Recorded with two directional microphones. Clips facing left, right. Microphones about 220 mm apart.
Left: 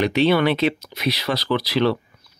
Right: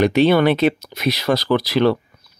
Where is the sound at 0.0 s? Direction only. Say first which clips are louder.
Right 4 dB; 45° right (ahead or behind).